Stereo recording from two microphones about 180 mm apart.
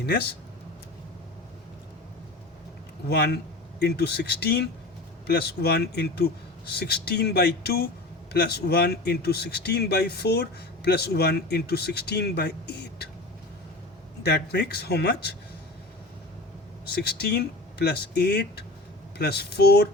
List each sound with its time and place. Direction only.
0.0 s speech: 65° left (ahead or behind)
3.1 s speech: 60° left (ahead or behind)
14.3 s speech: 65° left (ahead or behind)
17.0 s speech: 60° left (ahead or behind)